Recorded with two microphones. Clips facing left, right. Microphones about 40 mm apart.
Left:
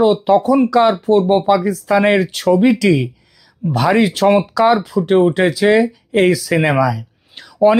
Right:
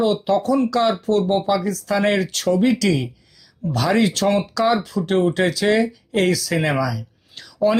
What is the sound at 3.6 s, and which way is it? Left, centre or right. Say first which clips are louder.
Speech: left 4 dB; left.